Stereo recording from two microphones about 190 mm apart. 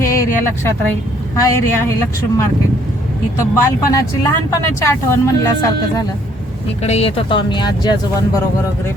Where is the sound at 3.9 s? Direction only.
20° left (ahead or behind).